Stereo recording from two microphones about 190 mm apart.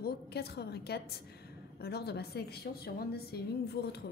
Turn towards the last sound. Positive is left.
turn(degrees=55)  # may be behind; listen again after turning